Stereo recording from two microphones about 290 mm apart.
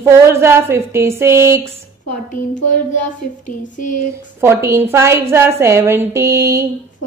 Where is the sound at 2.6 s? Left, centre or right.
Left.